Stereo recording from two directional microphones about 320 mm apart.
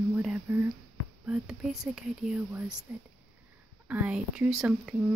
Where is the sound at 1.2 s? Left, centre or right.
Centre.